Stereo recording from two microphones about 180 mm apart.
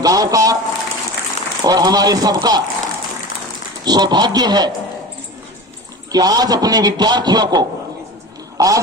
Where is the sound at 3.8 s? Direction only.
20° right (ahead or behind).